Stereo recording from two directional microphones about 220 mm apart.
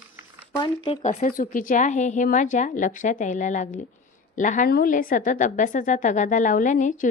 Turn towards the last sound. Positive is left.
turn(degrees=35)  # may be behind; listen again after turning